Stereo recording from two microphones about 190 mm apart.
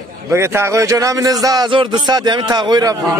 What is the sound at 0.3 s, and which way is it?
A man's voice, 15° right (ahead or behind).